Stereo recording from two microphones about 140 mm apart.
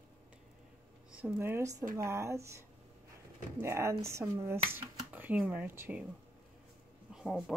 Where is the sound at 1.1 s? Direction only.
10° right (ahead or behind).